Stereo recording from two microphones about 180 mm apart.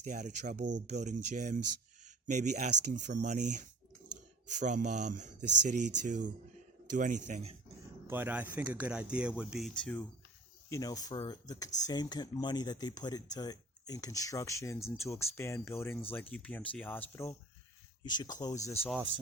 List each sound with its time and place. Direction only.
0.0 s speech: 45° right (ahead or behind)
8.0 s speech: 10° right (ahead or behind)
10.7 s speech: 20° left (ahead or behind)